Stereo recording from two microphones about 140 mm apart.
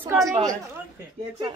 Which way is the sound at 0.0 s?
20° right (ahead or behind).